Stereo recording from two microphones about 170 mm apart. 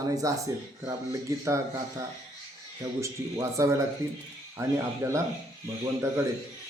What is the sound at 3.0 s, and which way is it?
Speech, 20° right (ahead or behind).